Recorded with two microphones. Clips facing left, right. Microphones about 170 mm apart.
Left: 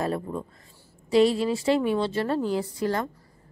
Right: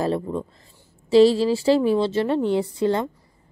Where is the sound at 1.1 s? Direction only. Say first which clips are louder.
Right 5 dB; 30° right (ahead or behind).